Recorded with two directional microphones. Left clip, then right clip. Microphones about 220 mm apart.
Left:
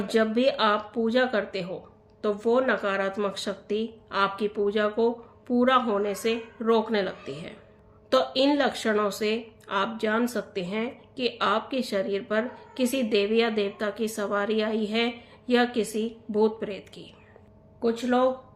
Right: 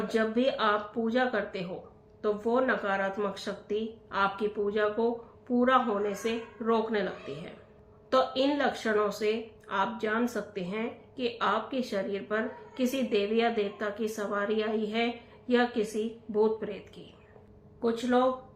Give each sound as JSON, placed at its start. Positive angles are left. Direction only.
{"t": 0.1, "sound": "speech", "side_deg": 45}